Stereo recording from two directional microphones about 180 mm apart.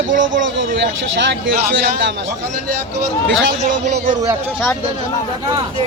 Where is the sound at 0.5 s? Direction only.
85° right.